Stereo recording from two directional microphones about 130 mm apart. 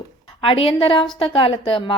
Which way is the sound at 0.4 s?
45° left (ahead or behind).